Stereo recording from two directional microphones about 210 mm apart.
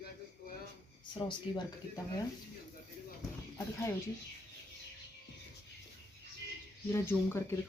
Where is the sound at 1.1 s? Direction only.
20° left (ahead or behind).